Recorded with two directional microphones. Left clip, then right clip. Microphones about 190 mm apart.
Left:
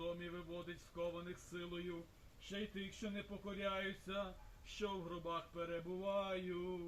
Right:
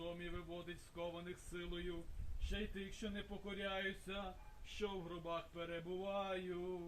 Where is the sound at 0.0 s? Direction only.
25° right (ahead or behind).